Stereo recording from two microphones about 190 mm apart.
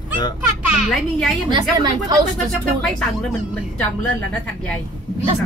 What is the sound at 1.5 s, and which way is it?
Speech, 20° right (ahead or behind).